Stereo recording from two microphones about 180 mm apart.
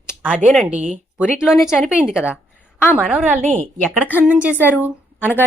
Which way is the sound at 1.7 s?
5° right (ahead or behind).